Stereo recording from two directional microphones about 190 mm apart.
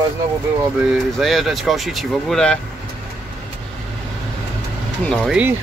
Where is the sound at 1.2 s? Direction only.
Centre (ahead or behind).